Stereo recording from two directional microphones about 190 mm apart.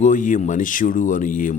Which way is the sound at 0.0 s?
40° left (ahead or behind).